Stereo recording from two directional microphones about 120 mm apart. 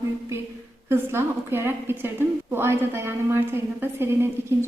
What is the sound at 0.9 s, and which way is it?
A woman's voice, 20° right (ahead or behind).